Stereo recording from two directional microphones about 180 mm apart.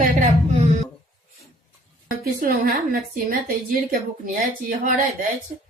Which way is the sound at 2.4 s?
55° right (ahead or behind).